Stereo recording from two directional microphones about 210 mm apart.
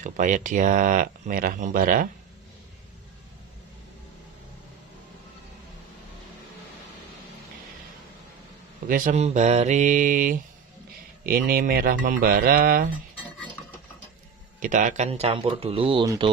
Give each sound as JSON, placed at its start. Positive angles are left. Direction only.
{"t": 0.0, "sound": "speech", "side_deg": -40}
{"t": 8.8, "sound": "speech", "side_deg": -40}
{"t": 14.6, "sound": "speech", "side_deg": -35}